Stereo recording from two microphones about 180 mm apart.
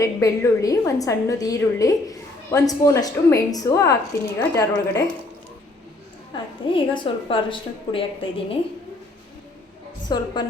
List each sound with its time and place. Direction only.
0.0 s a woman's voice: 20° left (ahead or behind)
6.3 s a woman's voice: 30° left (ahead or behind)
10.1 s a woman's voice: 20° left (ahead or behind)